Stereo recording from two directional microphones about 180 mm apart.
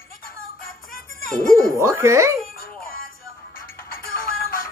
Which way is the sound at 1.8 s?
15° right (ahead or behind).